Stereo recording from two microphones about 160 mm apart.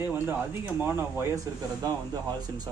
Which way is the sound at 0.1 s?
10° right (ahead or behind).